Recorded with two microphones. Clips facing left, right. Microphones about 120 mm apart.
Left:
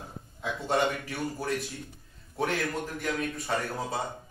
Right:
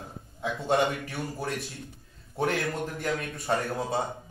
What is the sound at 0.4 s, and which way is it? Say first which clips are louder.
Speech: right 2 dB; 25° right (ahead or behind).